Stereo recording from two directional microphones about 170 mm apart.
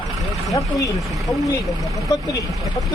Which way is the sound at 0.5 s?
20° left (ahead or behind).